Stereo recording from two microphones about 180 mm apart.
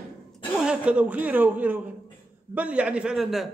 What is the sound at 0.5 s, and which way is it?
A man's voice, 5° right (ahead or behind).